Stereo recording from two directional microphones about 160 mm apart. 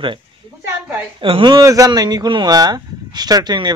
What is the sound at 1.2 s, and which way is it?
Speech, 30° right (ahead or behind).